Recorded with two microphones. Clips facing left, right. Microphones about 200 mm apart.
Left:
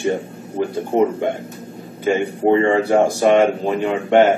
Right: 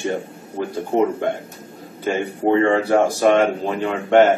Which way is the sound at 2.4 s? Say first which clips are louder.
Left 1 dB; 15° left (ahead or behind).